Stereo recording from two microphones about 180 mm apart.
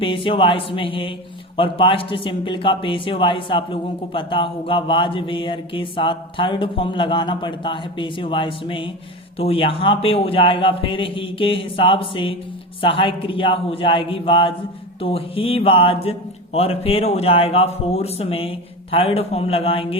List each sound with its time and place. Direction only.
0.0 s a man's voice: 30° left (ahead or behind)